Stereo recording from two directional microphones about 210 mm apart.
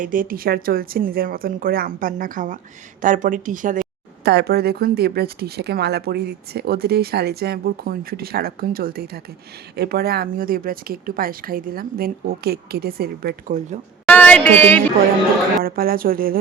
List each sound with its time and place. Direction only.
0.0 s speech: 40° right (ahead or behind)
4.2 s speech: 50° right (ahead or behind)
14.1 s a woman's voice: 5° left (ahead or behind)
15.6 s speech: 45° right (ahead or behind)